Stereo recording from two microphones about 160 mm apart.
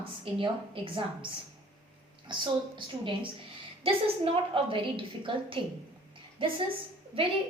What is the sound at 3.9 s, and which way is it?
A woman's voice, 35° right (ahead or behind).